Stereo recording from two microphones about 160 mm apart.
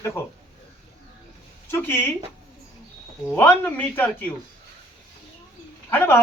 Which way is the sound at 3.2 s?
10° left (ahead or behind).